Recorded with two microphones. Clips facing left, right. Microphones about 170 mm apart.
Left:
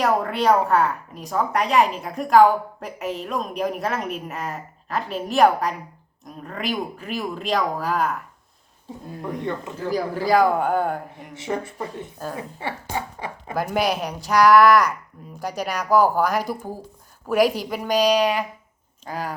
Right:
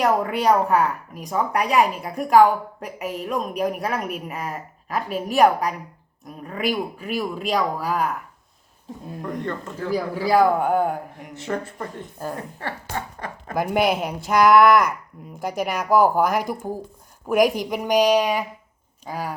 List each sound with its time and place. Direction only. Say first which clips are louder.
0.0 s a woman's voice: even; 10° right (ahead or behind)
9.2 s speech: left 1 dB; 10° left (ahead or behind)
9.9 s a woman's voice: even; 10° right (ahead or behind)
11.4 s a woman's voice: left 1 dB; 10° left (ahead or behind)
14.3 s a woman's voice: even; 20° right (ahead or behind)